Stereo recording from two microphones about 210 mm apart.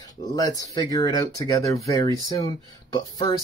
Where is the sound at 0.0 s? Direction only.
20° left (ahead or behind).